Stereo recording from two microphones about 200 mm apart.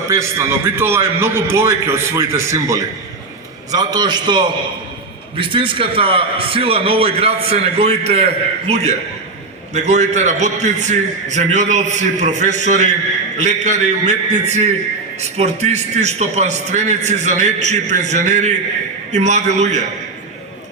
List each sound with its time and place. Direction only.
0.1 s a man's voice: 15° right (ahead or behind); by 19.8 s 35° right (ahead or behind)